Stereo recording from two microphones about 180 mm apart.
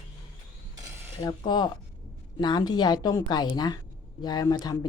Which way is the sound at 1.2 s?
25° left (ahead or behind).